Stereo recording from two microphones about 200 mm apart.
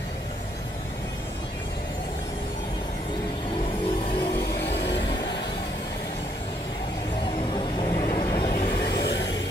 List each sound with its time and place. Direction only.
4.6 s vehicle: 60° left (ahead or behind)
7.5 s vehicle: 20° left (ahead or behind)
8.8 s vehicle: 60° left (ahead or behind)